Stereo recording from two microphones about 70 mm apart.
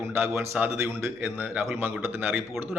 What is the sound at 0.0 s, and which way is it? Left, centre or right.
A man's voice, right.